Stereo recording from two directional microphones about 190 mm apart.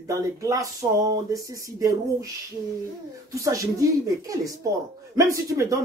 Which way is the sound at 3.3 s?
15° right (ahead or behind).